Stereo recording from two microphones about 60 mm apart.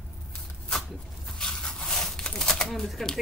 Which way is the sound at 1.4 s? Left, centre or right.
Centre.